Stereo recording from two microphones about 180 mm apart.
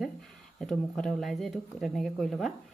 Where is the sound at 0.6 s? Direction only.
Centre (ahead or behind).